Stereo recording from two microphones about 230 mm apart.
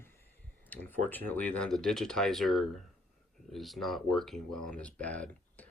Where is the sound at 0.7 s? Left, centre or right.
Centre.